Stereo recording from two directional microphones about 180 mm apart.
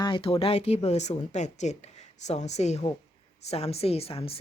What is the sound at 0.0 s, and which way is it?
A woman's voice, 30° left (ahead or behind).